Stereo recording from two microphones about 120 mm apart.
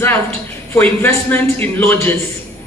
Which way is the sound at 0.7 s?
15° left (ahead or behind).